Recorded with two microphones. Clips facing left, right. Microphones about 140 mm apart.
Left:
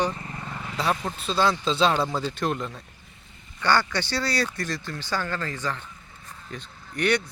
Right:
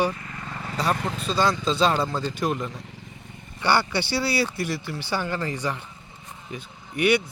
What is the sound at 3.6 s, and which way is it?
Speech, 10° right (ahead or behind).